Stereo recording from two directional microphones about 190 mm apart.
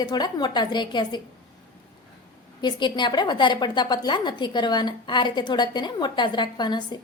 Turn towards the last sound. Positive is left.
turn(degrees=25)  # may be behind; listen again after turning